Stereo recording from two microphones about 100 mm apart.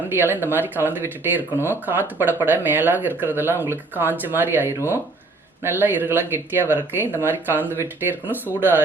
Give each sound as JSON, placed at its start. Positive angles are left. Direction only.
{"t": 0.1, "sound": "speech", "side_deg": -20}